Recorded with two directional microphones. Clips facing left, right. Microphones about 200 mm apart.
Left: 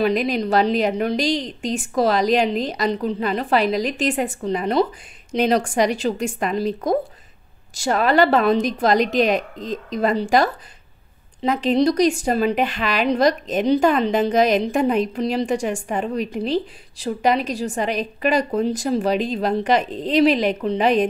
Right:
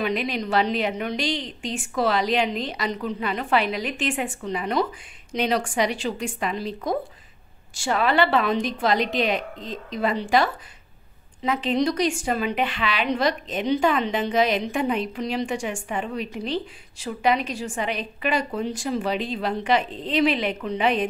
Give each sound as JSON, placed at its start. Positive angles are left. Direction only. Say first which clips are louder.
{"t": 0.0, "sound": "a woman's voice", "louder": "left 6 dB", "side_deg": 40}